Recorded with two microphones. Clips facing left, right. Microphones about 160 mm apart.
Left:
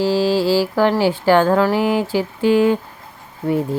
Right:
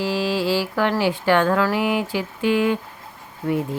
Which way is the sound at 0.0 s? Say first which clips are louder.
Left 6 dB; 30° left (ahead or behind).